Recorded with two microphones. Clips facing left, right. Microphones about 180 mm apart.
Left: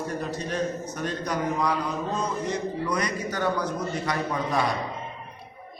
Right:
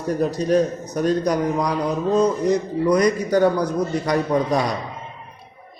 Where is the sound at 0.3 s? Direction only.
35° right (ahead or behind).